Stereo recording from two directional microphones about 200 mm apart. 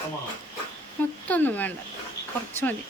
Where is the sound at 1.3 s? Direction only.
10° left (ahead or behind).